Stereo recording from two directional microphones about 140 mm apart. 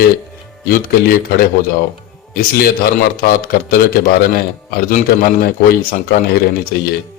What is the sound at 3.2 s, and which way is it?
A man's voice, 90° left.